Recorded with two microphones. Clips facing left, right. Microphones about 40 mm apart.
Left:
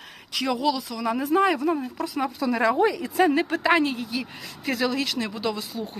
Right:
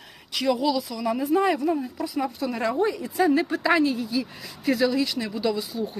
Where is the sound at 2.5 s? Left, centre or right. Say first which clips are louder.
Left 5 dB; left.